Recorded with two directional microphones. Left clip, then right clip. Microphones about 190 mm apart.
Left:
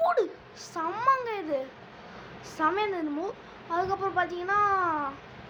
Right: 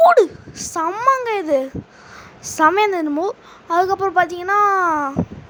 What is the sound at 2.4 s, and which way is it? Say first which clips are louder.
Speech: right 13 dB; 50° right (ahead or behind).